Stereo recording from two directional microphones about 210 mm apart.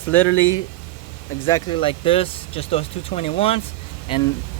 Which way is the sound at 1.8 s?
25° left (ahead or behind).